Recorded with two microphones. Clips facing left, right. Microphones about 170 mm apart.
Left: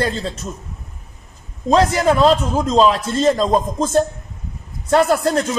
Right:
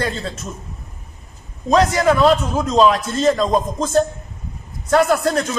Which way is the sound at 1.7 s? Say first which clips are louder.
Even; 25° left (ahead or behind).